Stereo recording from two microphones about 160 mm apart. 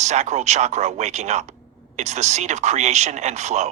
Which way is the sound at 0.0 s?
45° right (ahead or behind).